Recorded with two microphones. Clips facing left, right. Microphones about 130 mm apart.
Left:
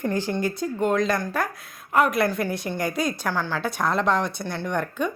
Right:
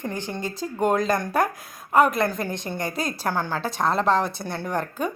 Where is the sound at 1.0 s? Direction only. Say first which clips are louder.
Right 2 dB; 40° right (ahead or behind).